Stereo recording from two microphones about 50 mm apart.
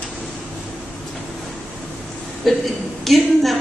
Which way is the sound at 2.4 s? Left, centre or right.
Centre.